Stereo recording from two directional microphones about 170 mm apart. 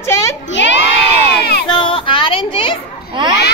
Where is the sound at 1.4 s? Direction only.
70° left (ahead or behind).